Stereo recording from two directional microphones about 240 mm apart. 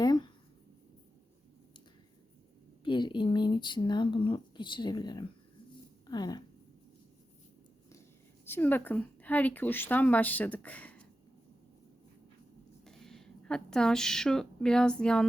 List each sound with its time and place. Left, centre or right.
0.0 s a sound: centre
2.8 s a woman's voice: centre
8.4 s a woman's voice: centre
12.8 s a woman's voice: centre